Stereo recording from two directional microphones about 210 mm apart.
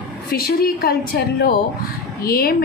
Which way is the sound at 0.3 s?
45° left (ahead or behind).